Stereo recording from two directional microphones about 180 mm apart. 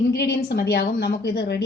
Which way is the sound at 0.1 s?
65° left (ahead or behind).